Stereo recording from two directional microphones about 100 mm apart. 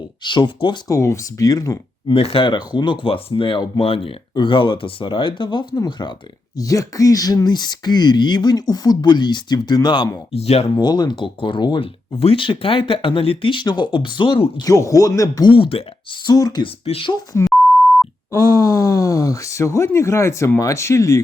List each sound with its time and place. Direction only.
0.2 s speech: 50° left (ahead or behind)
0.9 s speech: 30° left (ahead or behind)
2.0 s speech: 70° left (ahead or behind); by 10.1 s 45° left (ahead or behind)
10.3 s speech: 90° left
10.8 s speech: 45° left (ahead or behind)
14.6 s speech: 35° left (ahead or behind)
15.4 s speech: 60° left (ahead or behind)
16.2 s speech: 40° left (ahead or behind)
16.8 s speech: 75° left (ahead or behind)
17.3 s speech: 30° left (ahead or behind)